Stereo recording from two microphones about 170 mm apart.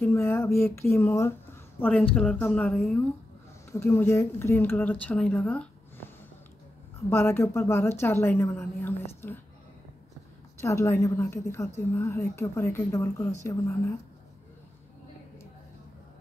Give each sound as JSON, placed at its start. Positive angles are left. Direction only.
{"t": 0.0, "sound": "a sound", "side_deg": 15}
{"t": 1.8, "sound": "a woman's voice", "side_deg": 5}
{"t": 7.1, "sound": "a woman's voice", "side_deg": 15}
{"t": 10.6, "sound": "a woman's voice", "side_deg": 15}